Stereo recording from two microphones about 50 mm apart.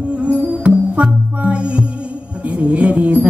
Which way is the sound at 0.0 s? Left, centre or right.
Right.